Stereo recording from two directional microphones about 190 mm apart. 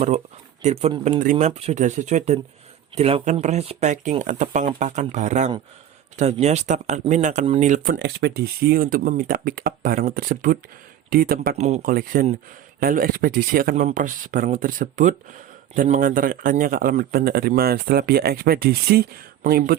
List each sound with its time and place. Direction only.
0.6 s speech: 35° right (ahead or behind); by 11.5 s 50° right (ahead or behind)
11.5 s speech: 35° right (ahead or behind); by 19.7 s 50° right (ahead or behind)